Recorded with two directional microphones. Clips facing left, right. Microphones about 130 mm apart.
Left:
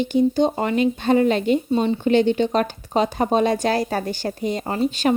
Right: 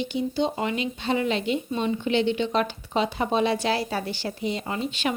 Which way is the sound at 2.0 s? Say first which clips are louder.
Left 6 dB; 45° left (ahead or behind).